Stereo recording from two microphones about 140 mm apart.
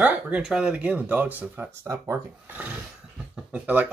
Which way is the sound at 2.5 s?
10° right (ahead or behind).